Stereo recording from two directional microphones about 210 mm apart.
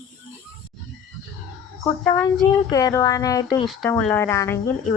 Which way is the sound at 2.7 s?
15° left (ahead or behind).